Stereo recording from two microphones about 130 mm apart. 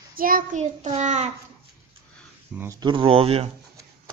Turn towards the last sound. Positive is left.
turn(degrees=-50)  # may be behind; listen again after turning